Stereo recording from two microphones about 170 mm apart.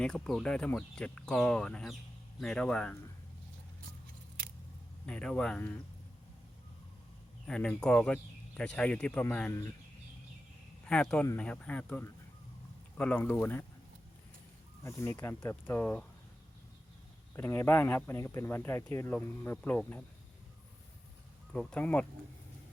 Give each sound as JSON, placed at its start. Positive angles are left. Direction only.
{"t": 0.0, "sound": "speech", "side_deg": 5}
{"t": 5.0, "sound": "speech", "side_deg": 5}
{"t": 7.4, "sound": "speech", "side_deg": 5}
{"t": 10.8, "sound": "speech", "side_deg": 5}
{"t": 14.8, "sound": "speech", "side_deg": 15}
{"t": 17.3, "sound": "speech", "side_deg": 15}
{"t": 21.5, "sound": "speech", "side_deg": 5}